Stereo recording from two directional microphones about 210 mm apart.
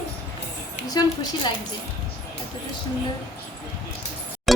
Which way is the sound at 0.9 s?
20° left (ahead or behind).